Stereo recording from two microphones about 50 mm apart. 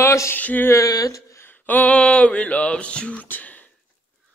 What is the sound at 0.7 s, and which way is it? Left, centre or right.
Speech, left.